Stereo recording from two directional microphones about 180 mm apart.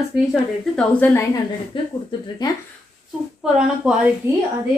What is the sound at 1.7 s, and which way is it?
Speech, 30° left (ahead or behind).